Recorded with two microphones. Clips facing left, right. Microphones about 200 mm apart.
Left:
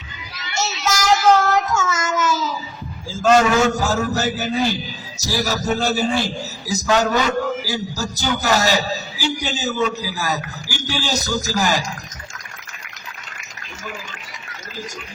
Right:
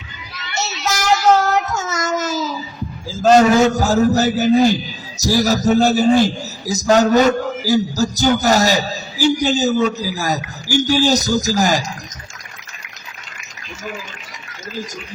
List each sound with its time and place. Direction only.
1.4 s child singing: 40° right (ahead or behind)
3.2 s a man's voice: 35° right (ahead or behind)